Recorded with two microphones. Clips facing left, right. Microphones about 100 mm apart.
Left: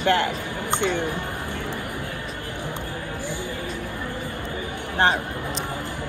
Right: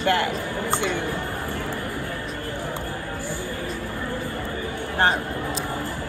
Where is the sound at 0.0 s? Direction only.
20° left (ahead or behind).